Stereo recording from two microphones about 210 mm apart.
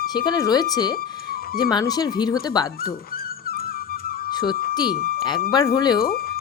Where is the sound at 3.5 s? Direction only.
45° left (ahead or behind).